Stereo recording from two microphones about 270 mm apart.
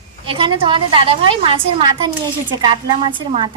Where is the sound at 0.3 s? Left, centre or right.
Centre.